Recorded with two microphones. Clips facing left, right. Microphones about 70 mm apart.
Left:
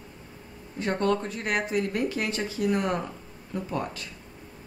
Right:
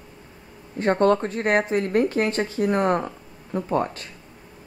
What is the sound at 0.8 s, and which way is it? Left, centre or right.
Speech, right.